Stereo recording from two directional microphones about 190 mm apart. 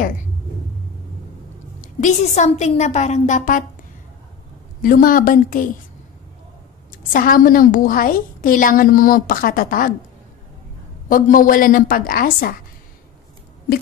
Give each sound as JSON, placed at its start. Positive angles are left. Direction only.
{"t": 1.8, "sound": "a woman's voice", "side_deg": 40}
{"t": 4.8, "sound": "a woman's voice", "side_deg": 50}
{"t": 7.1, "sound": "a woman's voice", "side_deg": 45}
{"t": 11.1, "sound": "a woman's voice", "side_deg": 45}